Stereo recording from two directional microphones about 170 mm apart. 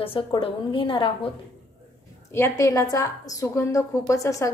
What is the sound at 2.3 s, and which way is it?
A woman's voice, 15° left (ahead or behind).